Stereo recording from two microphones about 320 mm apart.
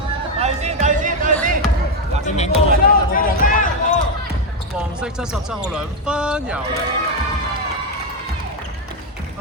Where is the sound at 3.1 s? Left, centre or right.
Left.